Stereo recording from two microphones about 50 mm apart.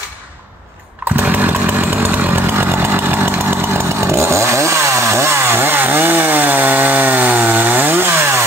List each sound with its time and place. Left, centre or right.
1.2 s chainsaw: right